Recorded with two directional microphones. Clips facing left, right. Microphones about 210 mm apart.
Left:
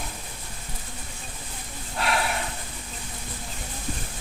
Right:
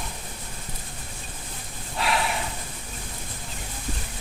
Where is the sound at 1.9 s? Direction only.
Centre (ahead or behind).